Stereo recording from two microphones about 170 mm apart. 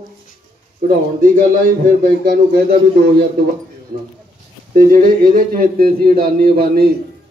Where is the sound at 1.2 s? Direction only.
50° right (ahead or behind).